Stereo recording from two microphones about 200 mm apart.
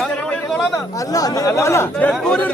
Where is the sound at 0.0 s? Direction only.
5° left (ahead or behind).